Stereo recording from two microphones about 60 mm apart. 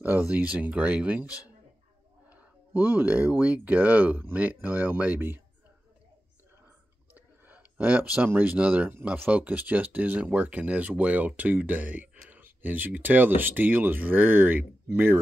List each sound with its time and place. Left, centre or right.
0.2 s speech: right
2.2 s speech: right
7.2 s a sound: right
8.5 s speech: right